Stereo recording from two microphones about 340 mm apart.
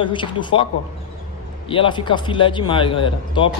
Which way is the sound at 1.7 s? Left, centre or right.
Centre.